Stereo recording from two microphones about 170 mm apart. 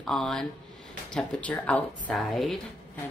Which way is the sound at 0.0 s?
Centre (ahead or behind).